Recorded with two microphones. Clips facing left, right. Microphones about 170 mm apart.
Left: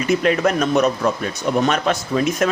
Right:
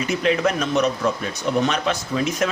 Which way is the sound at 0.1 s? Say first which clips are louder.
Left 4 dB; 50° left (ahead or behind).